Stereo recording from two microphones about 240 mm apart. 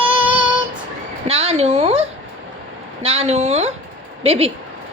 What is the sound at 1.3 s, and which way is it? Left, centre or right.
Speech, right.